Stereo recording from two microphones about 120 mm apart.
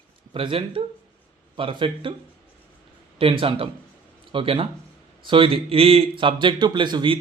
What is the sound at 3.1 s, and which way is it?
Speech, 50° right (ahead or behind).